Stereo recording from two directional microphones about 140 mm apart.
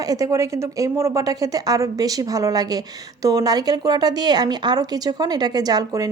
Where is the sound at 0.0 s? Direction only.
25° right (ahead or behind).